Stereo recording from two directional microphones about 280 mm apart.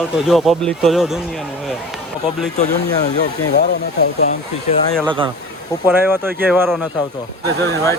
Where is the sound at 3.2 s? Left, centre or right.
Left.